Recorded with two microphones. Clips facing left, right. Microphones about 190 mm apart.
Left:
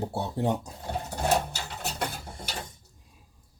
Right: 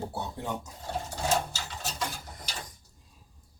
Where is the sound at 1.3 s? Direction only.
60° left (ahead or behind).